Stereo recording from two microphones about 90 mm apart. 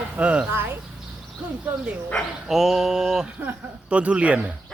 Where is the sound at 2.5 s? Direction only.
5° right (ahead or behind).